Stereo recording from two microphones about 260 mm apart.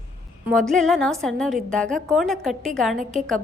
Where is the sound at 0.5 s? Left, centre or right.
Centre.